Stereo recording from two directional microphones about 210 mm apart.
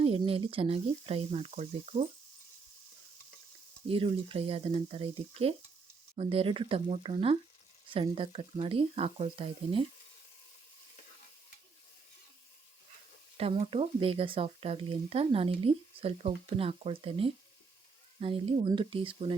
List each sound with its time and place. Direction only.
0.0 s speech: 25° right (ahead or behind)
3.8 s speech: 25° right (ahead or behind)
13.3 s speech: 30° right (ahead or behind)